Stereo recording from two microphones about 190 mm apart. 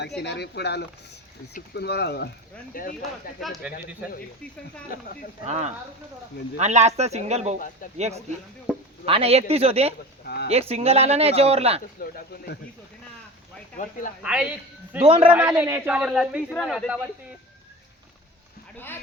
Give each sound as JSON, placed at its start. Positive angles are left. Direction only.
{"t": 0.2, "sound": "speech", "side_deg": 60}
{"t": 2.7, "sound": "speech", "side_deg": 50}
{"t": 5.5, "sound": "speech", "side_deg": -35}
{"t": 8.7, "sound": "speech", "side_deg": -5}
{"t": 9.0, "sound": "speech", "side_deg": -30}
{"t": 10.2, "sound": "speech", "side_deg": 60}
{"t": 10.5, "sound": "speech", "side_deg": -30}
{"t": 11.9, "sound": "speech", "side_deg": 50}
{"t": 14.2, "sound": "a man's voice", "side_deg": -5}
{"t": 15.0, "sound": "a man's voice", "side_deg": -30}
{"t": 15.3, "sound": "a man's voice", "side_deg": -5}